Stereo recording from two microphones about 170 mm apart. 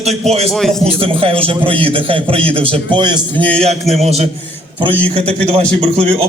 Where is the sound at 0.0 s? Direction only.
40° right (ahead or behind).